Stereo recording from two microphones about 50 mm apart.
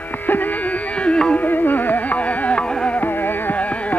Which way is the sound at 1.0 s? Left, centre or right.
Left.